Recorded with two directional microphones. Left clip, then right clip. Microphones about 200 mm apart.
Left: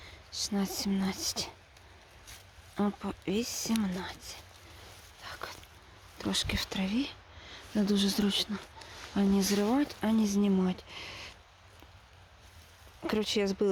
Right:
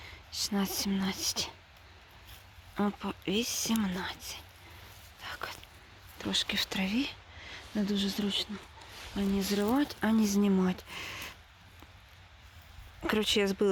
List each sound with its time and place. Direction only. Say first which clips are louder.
0.0 s speech: right 1 dB; centre (ahead or behind)
2.7 s speech: even; 5° left (ahead or behind)
5.2 s dog: right 2 dB; 5° left (ahead or behind)
6.1 s speech: right 2 dB; 15° left (ahead or behind)
7.8 s speech: left 3 dB; 25° left (ahead or behind)
9.5 s speech: even; 5° left (ahead or behind)
13.0 s speech: right 2 dB; centre (ahead or behind)